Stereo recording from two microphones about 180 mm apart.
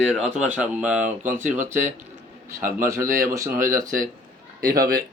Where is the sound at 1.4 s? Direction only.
45° right (ahead or behind).